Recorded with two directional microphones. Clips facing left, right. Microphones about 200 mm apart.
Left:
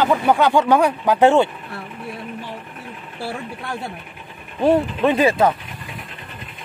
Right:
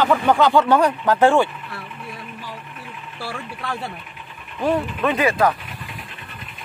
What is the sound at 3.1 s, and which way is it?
Speech, 20° left (ahead or behind).